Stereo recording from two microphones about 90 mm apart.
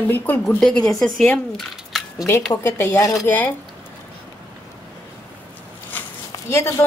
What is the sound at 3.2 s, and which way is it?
Speech, 20° left (ahead or behind).